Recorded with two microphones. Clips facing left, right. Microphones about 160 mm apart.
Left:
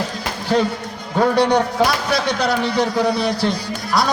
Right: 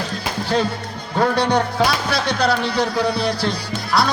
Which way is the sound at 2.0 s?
20° left (ahead or behind).